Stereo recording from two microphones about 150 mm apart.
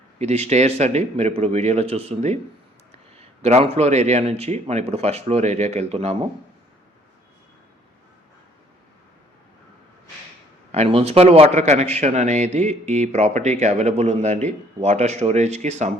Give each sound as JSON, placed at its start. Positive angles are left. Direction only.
{"t": 0.2, "sound": "a man's voice", "side_deg": -45}
{"t": 10.7, "sound": "a man's voice", "side_deg": -45}